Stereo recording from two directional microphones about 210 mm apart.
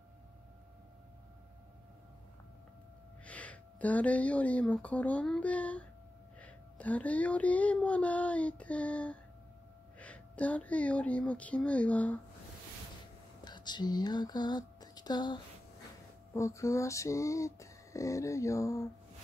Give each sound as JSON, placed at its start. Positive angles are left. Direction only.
{"t": 3.3, "sound": "speech", "side_deg": 5}
{"t": 6.4, "sound": "music", "side_deg": 5}
{"t": 13.4, "sound": "a sound", "side_deg": 20}
{"t": 16.3, "sound": "music", "side_deg": 15}